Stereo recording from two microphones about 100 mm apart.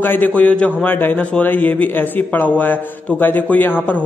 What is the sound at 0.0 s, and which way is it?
A man's voice, 20° left (ahead or behind).